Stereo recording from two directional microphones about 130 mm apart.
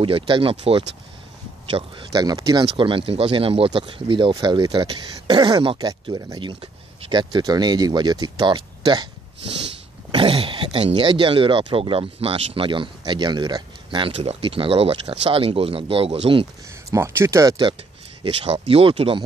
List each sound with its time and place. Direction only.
0.0 s speech: 45° right (ahead or behind)
2.1 s speech: 30° right (ahead or behind)
2.6 s speech: 40° right (ahead or behind)
10.1 s speech: 45° right (ahead or behind)
16.9 s speech: 20° right (ahead or behind)
18.2 s speech: 50° right (ahead or behind)